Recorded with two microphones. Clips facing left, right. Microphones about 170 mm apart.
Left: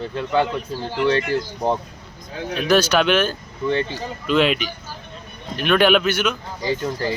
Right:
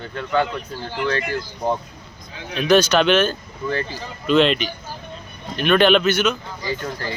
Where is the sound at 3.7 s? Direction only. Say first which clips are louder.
Left 3 dB; 25° left (ahead or behind).